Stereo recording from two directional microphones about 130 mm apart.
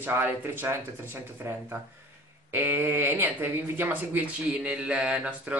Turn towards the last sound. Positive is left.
turn(degrees=-10)  # may be behind; listen again after turning